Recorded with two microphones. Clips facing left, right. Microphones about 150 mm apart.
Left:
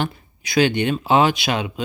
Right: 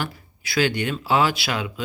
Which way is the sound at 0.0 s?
20° left (ahead or behind).